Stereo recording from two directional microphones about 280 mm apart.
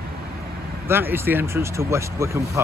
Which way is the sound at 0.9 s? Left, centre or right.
Centre.